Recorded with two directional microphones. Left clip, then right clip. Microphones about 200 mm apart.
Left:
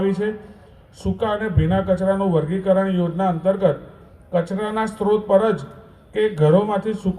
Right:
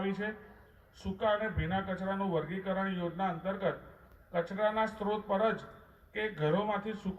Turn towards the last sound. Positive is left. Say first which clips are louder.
# left 12 dB
turn(degrees=50)  # may be behind; listen again after turning